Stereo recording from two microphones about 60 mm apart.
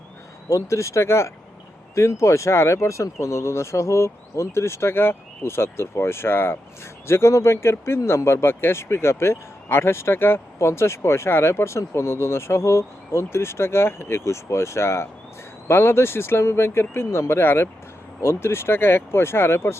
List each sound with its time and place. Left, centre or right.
0.5 s speech: left
7.1 s speech: left